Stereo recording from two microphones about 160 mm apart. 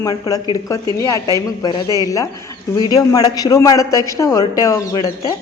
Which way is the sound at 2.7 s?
25° left (ahead or behind).